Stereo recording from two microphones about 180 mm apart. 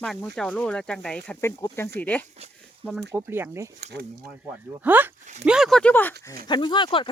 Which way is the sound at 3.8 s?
65° right (ahead or behind).